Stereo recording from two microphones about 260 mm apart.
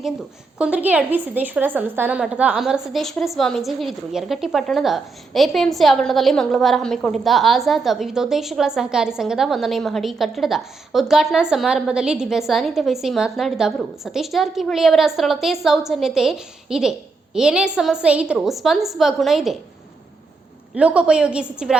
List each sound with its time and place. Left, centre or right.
0.6 s a woman's voice: centre
20.7 s a woman's voice: centre